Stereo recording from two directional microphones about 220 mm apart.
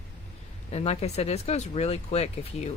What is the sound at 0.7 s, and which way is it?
Speech, 30° left (ahead or behind).